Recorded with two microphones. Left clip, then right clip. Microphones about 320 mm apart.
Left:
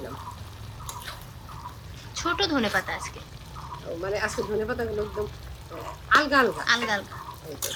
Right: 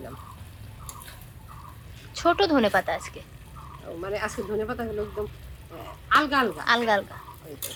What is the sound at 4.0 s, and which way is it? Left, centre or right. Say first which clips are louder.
Speech: left 2 dB; centre.